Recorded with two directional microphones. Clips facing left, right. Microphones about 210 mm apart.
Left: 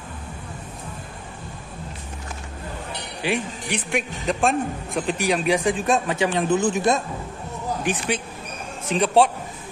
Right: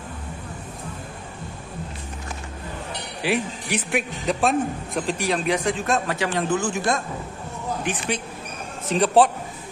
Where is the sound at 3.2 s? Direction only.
5° right (ahead or behind).